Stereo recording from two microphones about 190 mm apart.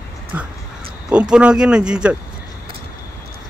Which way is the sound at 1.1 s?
5° right (ahead or behind).